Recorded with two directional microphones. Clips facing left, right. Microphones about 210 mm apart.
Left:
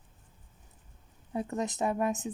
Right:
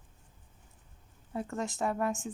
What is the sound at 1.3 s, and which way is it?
Speech, 20° left (ahead or behind).